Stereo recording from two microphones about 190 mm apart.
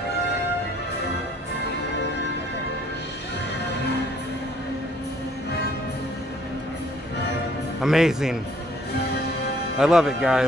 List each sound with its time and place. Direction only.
7.8 s speech: centre (ahead or behind)
9.8 s speech: 5° right (ahead or behind)